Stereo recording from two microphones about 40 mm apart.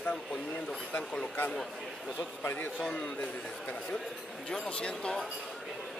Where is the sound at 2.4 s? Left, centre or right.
Left.